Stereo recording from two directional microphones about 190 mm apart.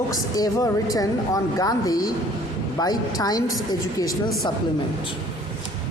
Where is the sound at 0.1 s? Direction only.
20° left (ahead or behind).